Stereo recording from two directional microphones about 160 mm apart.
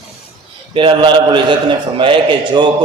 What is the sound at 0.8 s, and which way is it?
Speech, 30° right (ahead or behind).